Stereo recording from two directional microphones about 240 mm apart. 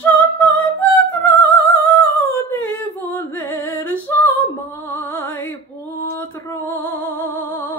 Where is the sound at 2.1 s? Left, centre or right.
Centre.